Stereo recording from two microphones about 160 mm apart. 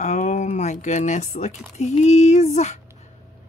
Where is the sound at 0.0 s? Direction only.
45° left (ahead or behind).